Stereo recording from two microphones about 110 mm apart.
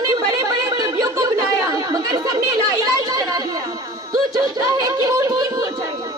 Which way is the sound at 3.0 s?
35° right (ahead or behind).